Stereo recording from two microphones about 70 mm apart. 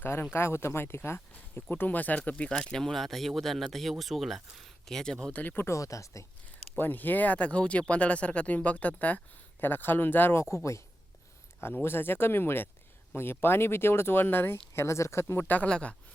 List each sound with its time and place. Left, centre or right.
0.0 s speech: left
1.7 s speech: left
5.4 s speech: left
5.6 s speech: left
6.7 s speech: left
10.5 s speech: left
11.6 s speech: left
14.7 s speech: left; by 16.0 s centre